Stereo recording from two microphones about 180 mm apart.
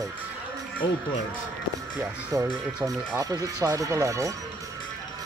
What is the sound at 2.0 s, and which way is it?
Speech, 20° right (ahead or behind).